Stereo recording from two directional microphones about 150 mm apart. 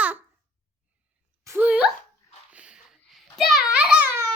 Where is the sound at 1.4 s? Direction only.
15° right (ahead or behind).